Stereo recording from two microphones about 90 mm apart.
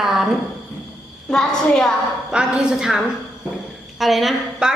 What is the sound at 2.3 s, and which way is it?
Speech, 10° right (ahead or behind).